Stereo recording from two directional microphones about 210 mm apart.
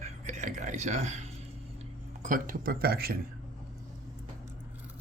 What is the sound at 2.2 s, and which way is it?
Speech, 40° right (ahead or behind).